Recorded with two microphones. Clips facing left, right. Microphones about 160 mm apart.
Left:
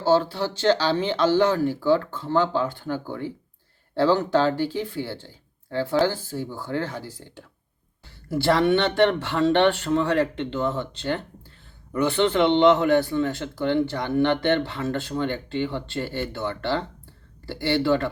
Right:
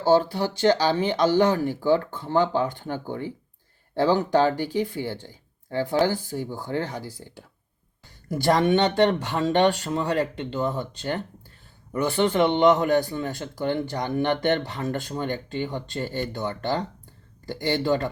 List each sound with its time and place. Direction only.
0.0 s speech: 15° right (ahead or behind)